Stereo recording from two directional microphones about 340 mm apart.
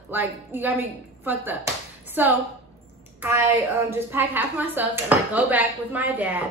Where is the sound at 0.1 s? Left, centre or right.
Centre.